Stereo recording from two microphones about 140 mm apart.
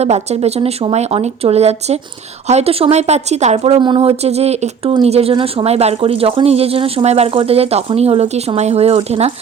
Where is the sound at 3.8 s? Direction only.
35° right (ahead or behind).